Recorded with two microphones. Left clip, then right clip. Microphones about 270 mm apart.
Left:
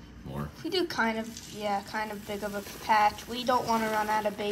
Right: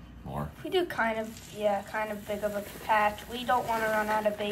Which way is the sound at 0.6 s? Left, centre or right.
Centre.